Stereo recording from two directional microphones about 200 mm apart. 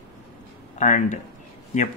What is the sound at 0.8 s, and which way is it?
Speech, 40° left (ahead or behind).